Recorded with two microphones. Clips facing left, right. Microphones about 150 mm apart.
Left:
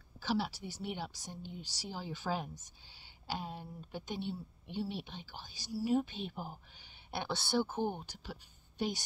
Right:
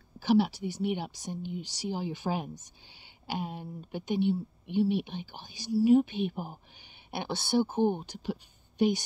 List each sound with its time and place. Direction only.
0.2 s speech: 15° right (ahead or behind)